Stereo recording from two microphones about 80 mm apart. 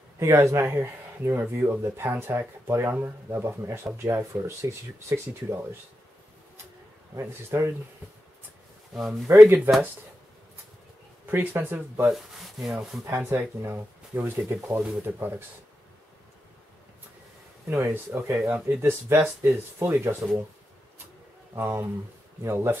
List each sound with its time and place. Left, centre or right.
0.2 s speech: right
7.2 s speech: right
8.9 s speech: centre
11.2 s speech: right
12.1 s speech: centre
13.0 s speech: right
14.5 s speech: right
15.0 s speech: right
17.6 s speech: right
21.5 s speech: right